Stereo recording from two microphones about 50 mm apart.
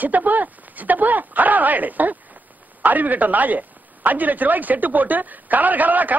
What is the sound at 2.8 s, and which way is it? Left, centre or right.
A man's voice, right.